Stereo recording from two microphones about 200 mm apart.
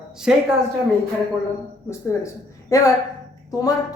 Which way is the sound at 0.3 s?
5° right (ahead or behind).